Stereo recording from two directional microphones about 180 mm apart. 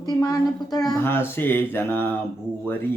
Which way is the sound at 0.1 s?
20° left (ahead or behind).